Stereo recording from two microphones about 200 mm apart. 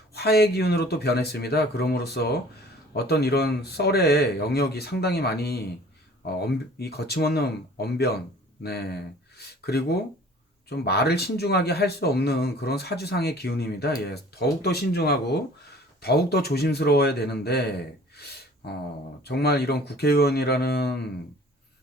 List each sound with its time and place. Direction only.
0.1 s speech: 55° left (ahead or behind)
18.2 s a sound: 55° left (ahead or behind)
19.2 s speech: 55° left (ahead or behind)